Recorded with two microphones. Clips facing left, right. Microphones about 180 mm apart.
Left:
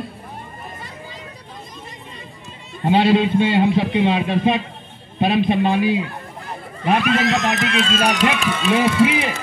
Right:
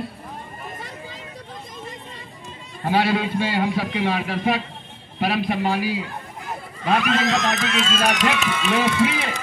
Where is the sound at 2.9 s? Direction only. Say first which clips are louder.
Left 5 dB; 20° left (ahead or behind).